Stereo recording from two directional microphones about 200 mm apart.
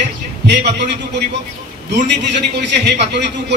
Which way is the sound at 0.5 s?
55° right (ahead or behind).